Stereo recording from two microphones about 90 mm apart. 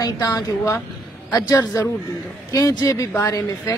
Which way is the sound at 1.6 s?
40° left (ahead or behind).